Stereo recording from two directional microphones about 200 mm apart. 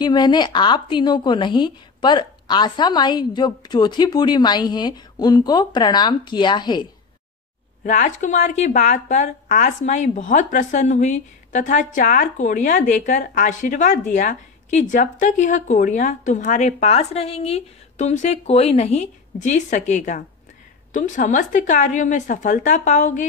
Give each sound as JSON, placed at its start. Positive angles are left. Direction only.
{"t": 0.0, "sound": "a woman's voice", "side_deg": 20}
{"t": 7.8, "sound": "speech", "side_deg": 40}